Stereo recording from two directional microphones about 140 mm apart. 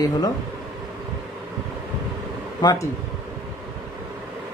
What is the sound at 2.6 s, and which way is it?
Speech, 30° left (ahead or behind).